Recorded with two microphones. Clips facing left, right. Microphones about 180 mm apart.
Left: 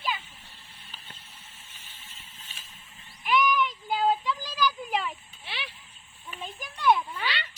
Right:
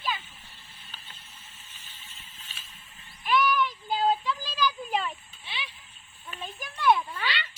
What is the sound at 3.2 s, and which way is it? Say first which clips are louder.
Child singing: even; 15° left (ahead or behind).